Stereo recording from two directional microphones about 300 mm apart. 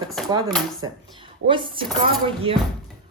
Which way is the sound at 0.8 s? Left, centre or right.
Centre.